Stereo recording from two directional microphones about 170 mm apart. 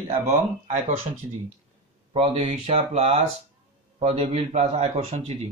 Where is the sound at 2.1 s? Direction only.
35° right (ahead or behind).